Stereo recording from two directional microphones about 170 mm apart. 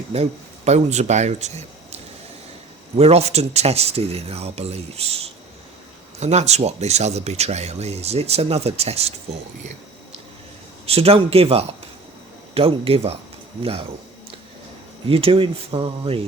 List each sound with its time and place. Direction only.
0.1 s speech: 40° right (ahead or behind)
10.8 s speech: 35° right (ahead or behind)
15.0 s speech: 30° right (ahead or behind)